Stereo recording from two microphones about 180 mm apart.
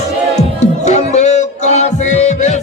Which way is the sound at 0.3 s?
40° left (ahead or behind).